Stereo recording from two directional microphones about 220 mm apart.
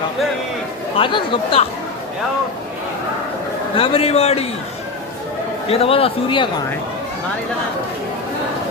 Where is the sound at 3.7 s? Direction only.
25° left (ahead or behind).